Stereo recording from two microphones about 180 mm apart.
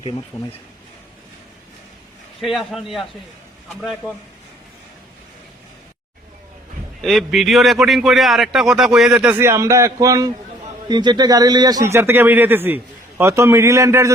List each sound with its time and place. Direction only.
2.4 s a man's voice: centre (ahead or behind)
7.0 s a man's voice: centre (ahead or behind); by 14.1 s 15° right (ahead or behind)